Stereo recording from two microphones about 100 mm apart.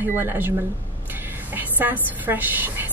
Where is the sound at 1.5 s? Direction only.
20° right (ahead or behind).